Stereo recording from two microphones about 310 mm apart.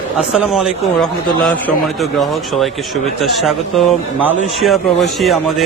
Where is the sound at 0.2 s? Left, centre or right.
Centre.